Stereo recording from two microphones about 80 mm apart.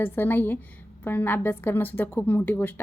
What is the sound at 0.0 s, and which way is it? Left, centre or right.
A woman's voice, left.